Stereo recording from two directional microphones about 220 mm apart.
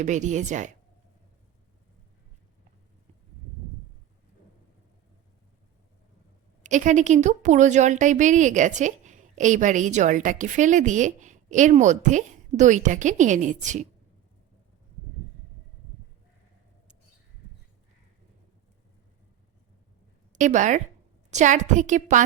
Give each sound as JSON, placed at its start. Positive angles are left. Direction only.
{"t": 0.0, "sound": "a woman's voice", "side_deg": -35}
{"t": 6.6, "sound": "a woman's voice", "side_deg": -35}
{"t": 20.3, "sound": "a woman's voice", "side_deg": -35}